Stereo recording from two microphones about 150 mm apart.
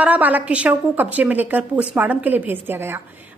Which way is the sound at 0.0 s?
10° right (ahead or behind).